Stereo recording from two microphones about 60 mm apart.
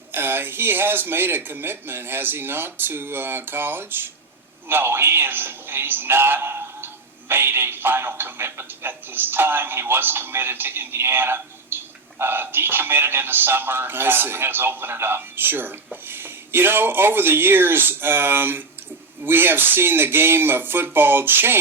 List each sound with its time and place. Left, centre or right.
0.1 s a man's voice: right